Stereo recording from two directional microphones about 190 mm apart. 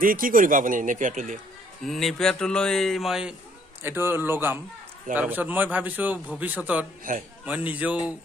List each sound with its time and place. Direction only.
0.0 s speech: 45° right (ahead or behind)
1.9 s a man's voice: centre (ahead or behind)